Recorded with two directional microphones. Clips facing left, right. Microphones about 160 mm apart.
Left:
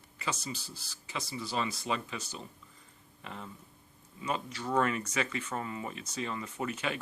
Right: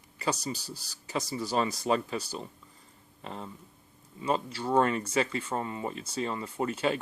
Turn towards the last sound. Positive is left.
turn(degrees=-30)  # may be behind; listen again after turning